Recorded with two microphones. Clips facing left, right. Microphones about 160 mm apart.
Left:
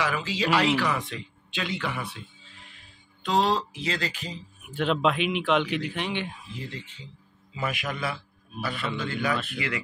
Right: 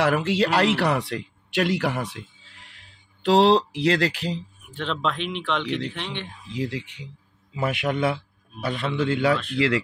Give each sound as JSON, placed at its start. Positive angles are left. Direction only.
{"t": 0.0, "sound": "speech", "side_deg": -70}
{"t": 4.6, "sound": "speech", "side_deg": 5}
{"t": 6.5, "sound": "a man's voice", "side_deg": -85}